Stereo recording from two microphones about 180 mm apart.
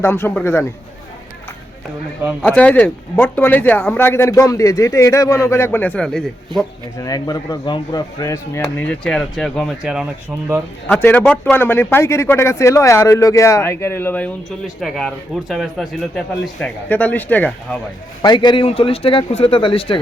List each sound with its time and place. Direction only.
0.0 s speech: 10° left (ahead or behind)
2.4 s speech: 10° left (ahead or behind)
7.0 s speech: 20° left (ahead or behind); by 10.6 s 5° right (ahead or behind)
10.9 s speech: 10° left (ahead or behind)
18.2 s a man's voice: 25° left (ahead or behind)